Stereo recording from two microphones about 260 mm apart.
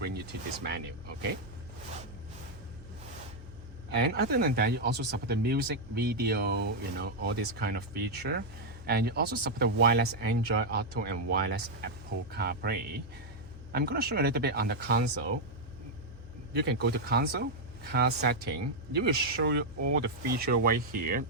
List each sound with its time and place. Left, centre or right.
0.0 s speech: right
3.9 s speech: right
16.6 s speech: right